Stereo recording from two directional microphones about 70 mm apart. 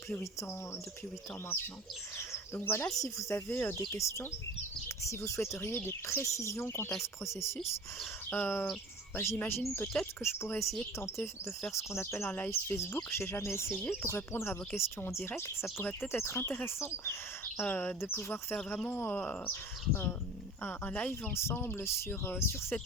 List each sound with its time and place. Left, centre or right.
0.2 s speech: left
2.1 s speech: left
2.9 s speech: left
5.1 s speech: left
8.3 s speech: left
9.8 s speech: centre
10.2 s speech: left
12.5 s speech: left
17.6 s speech: left
18.0 s speech: left
18.9 s speech: left
21.1 s speech: left